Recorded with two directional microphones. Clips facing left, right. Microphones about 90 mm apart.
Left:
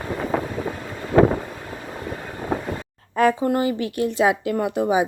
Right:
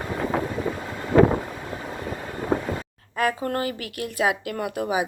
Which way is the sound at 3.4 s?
20° left (ahead or behind).